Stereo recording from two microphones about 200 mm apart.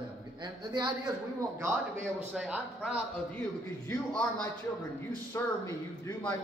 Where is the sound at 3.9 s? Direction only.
5° left (ahead or behind).